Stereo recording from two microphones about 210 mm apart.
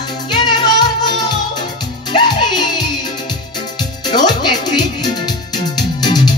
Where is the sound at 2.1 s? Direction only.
20° left (ahead or behind).